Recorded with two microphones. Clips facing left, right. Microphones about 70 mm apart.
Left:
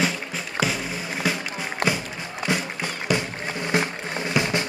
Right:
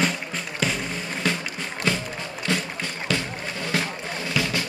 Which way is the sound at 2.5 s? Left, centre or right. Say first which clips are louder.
Left 1 dB; centre.